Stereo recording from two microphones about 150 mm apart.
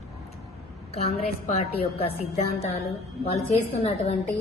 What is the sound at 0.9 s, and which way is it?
A woman's voice, 45° left (ahead or behind).